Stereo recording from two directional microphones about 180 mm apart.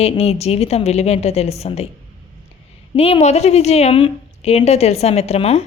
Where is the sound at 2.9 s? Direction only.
35° left (ahead or behind).